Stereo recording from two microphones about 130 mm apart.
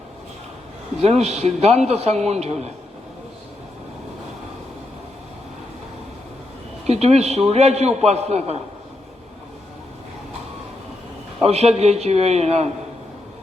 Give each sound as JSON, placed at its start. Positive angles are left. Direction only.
{"t": 1.0, "sound": "a man's voice", "side_deg": -55}
{"t": 6.8, "sound": "a man's voice", "side_deg": -55}
{"t": 11.4, "sound": "a man's voice", "side_deg": -55}